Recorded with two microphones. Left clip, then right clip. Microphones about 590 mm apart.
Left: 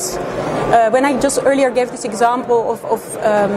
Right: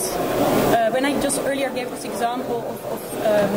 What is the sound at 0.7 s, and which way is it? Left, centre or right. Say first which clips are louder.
A woman's voice: left 7 dB; left.